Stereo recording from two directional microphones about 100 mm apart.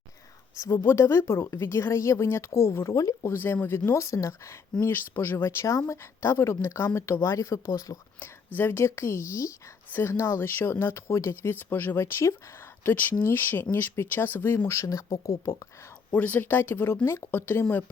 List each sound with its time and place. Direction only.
0.5 s speech: 30° left (ahead or behind)
3.3 s speech: 20° left (ahead or behind)
8.5 s speech: 25° left (ahead or behind)
14.8 s speech: 35° left (ahead or behind)
16.1 s speech: 15° left (ahead or behind)